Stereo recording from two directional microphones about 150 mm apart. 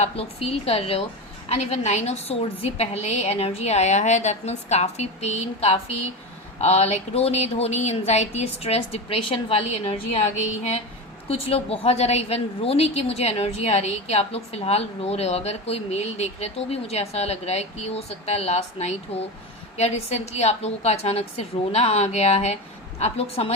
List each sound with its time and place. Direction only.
0.0 s a woman's voice: 45° left (ahead or behind)
11.3 s a woman's voice: 40° left (ahead or behind)